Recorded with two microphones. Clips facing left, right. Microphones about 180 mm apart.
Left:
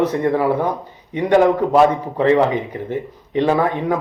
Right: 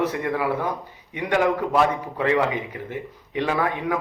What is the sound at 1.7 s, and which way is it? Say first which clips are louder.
Speech: left 7 dB; 30° left (ahead or behind).